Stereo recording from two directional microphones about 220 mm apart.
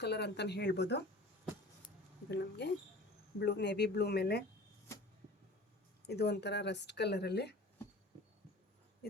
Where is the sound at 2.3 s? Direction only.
50° left (ahead or behind).